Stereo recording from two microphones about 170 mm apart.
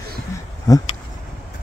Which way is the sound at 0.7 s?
20° left (ahead or behind).